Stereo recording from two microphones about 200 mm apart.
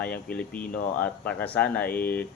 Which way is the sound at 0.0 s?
5° left (ahead or behind).